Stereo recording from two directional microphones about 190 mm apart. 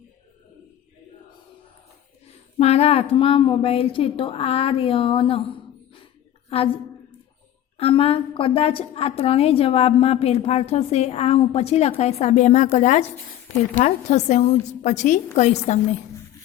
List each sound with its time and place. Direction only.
2.2 s a woman's voice: 35° left (ahead or behind)
7.8 s a woman's voice: 30° left (ahead or behind)